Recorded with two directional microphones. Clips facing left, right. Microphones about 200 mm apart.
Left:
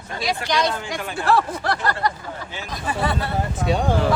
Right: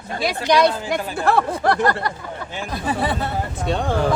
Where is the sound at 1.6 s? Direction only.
50° right (ahead or behind).